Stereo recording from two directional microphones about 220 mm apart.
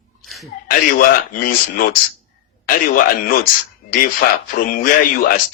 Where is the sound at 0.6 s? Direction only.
40° left (ahead or behind).